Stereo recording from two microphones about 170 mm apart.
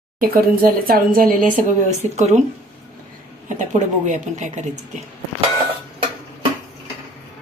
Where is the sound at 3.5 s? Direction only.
45° right (ahead or behind).